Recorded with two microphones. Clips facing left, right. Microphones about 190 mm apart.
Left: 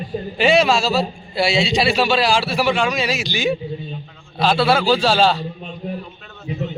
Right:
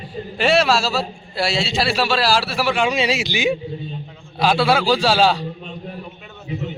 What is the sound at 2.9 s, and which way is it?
A man's voice, 25° right (ahead or behind).